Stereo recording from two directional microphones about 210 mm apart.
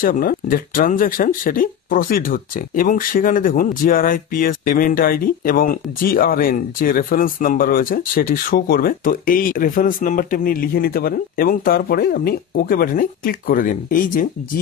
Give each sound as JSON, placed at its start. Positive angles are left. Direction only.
{"t": 0.0, "sound": "speech", "side_deg": 40}